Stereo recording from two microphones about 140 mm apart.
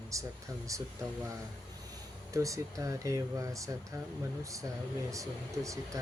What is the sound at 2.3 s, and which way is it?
Speech, 25° right (ahead or behind).